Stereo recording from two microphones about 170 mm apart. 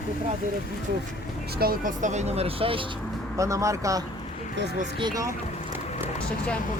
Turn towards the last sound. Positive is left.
turn(degrees=-25)  # may be behind; listen again after turning